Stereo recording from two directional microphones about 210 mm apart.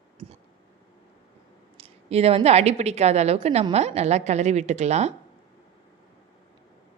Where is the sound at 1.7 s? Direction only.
30° right (ahead or behind).